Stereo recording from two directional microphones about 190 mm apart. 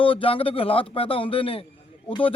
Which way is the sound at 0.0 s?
30° left (ahead or behind).